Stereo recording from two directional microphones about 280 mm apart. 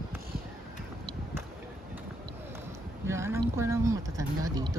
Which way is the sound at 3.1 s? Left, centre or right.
Centre.